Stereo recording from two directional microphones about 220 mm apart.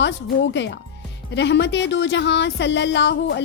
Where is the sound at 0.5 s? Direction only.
50° left (ahead or behind).